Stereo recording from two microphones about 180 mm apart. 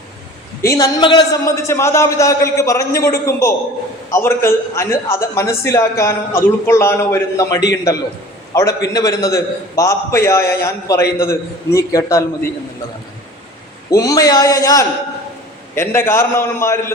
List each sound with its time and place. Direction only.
0.6 s a man's voice: 20° left (ahead or behind)
13.9 s a man's voice: 20° left (ahead or behind)